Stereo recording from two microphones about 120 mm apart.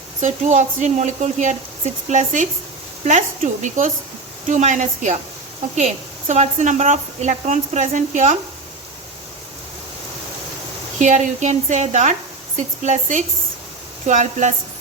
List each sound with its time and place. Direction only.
0.2 s a woman's voice: 90° right
11.0 s speech: 85° right